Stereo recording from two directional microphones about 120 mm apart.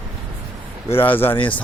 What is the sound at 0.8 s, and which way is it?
Speech, 55° left (ahead or behind).